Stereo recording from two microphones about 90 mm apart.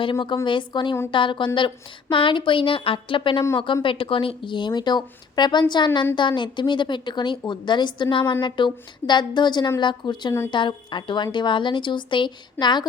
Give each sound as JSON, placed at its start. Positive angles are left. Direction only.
{"t": 0.0, "sound": "a woman's voice", "side_deg": 65}